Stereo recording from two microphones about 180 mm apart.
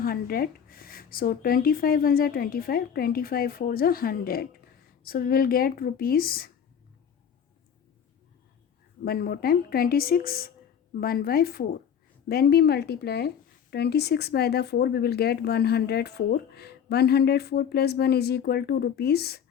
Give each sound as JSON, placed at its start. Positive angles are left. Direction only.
{"t": 0.0, "sound": "a woman's voice", "side_deg": 55}
{"t": 9.0, "sound": "a woman's voice", "side_deg": 55}